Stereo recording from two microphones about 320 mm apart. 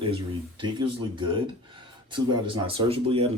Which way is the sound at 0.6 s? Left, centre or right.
Centre.